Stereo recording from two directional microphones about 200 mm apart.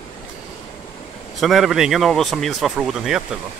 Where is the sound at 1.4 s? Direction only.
Centre (ahead or behind).